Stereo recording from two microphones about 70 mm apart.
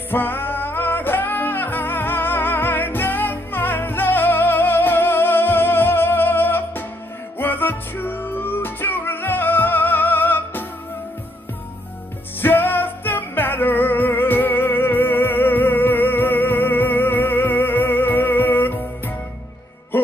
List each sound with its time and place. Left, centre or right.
0.1 s music: left
12.4 s music: left